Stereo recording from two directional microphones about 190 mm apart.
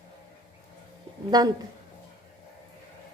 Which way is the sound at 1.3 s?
20° right (ahead or behind).